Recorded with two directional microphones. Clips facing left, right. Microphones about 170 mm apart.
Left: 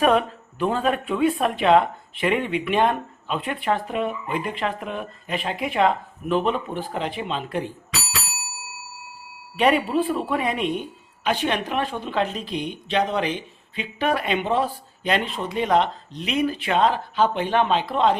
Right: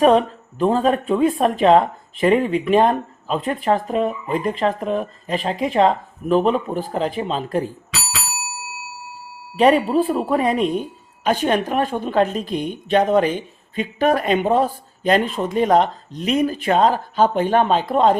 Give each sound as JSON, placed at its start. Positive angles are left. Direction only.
{"t": 0.0, "sound": "speech", "side_deg": -35}
{"t": 9.6, "sound": "speech", "side_deg": -35}